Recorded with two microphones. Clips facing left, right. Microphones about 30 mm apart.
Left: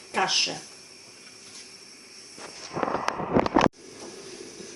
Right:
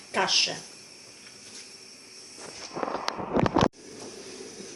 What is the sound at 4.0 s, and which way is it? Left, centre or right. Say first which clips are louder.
Train: even; centre.